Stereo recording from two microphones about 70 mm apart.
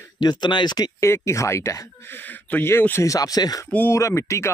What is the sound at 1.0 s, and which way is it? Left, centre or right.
Speech, left.